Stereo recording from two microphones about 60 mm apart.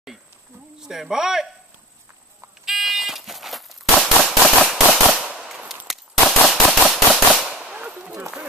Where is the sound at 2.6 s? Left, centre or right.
Centre.